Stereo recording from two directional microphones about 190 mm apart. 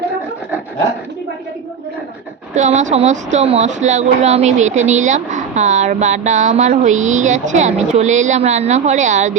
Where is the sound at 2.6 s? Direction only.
40° right (ahead or behind).